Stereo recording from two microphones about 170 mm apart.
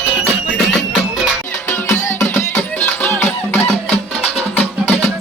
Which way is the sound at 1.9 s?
10° left (ahead or behind).